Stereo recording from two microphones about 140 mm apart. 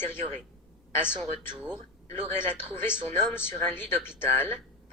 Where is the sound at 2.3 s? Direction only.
15° left (ahead or behind).